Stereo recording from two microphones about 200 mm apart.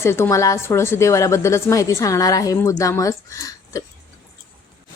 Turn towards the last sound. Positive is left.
turn(degrees=15)  # may be behind; listen again after turning